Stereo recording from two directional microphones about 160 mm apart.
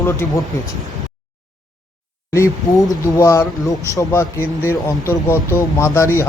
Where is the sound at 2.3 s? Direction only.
20° left (ahead or behind).